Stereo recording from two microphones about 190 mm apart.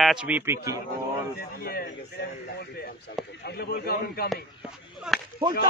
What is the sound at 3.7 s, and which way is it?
Speech, 55° left (ahead or behind).